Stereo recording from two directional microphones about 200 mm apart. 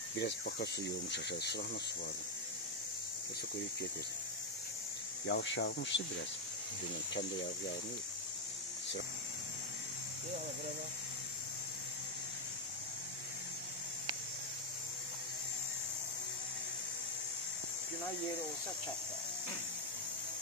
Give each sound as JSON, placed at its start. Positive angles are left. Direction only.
{"t": 0.2, "sound": "speech", "side_deg": 55}
{"t": 5.2, "sound": "speech", "side_deg": 60}